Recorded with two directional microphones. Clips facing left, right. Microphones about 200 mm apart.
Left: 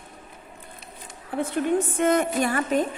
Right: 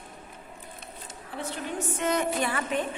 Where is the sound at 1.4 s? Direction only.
50° left (ahead or behind).